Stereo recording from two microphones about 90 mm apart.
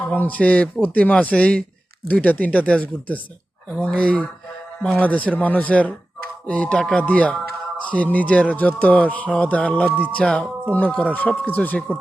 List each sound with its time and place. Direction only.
0.1 s speech: 20° left (ahead or behind)